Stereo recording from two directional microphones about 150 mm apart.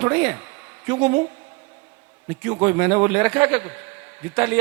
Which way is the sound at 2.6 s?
10° right (ahead or behind).